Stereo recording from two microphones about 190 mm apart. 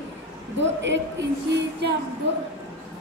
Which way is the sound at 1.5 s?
65° right (ahead or behind).